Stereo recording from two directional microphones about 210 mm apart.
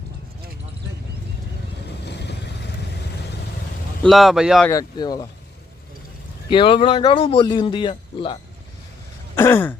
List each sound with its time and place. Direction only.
2.0 s vehicle: 55° left (ahead or behind)
4.0 s speech: centre (ahead or behind)
4.7 s speech: 20° left (ahead or behind)
6.5 s speech: 25° left (ahead or behind)
9.3 s throat clearing: 10° left (ahead or behind)